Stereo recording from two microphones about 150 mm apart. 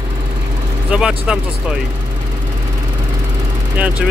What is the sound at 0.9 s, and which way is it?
Speech, 5° right (ahead or behind).